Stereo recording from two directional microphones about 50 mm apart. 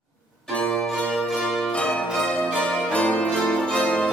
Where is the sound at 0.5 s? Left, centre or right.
Centre.